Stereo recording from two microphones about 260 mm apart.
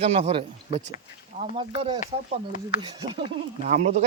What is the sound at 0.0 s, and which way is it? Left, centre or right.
Speech, right.